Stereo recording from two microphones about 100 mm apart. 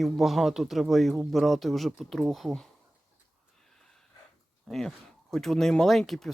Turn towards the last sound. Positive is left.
turn(degrees=5)  # may be behind; listen again after turning